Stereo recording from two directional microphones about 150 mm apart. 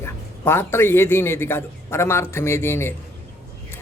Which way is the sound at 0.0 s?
15° left (ahead or behind).